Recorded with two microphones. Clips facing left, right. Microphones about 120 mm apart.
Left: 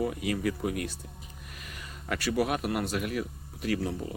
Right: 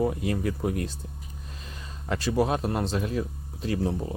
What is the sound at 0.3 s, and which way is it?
Speech, 30° right (ahead or behind).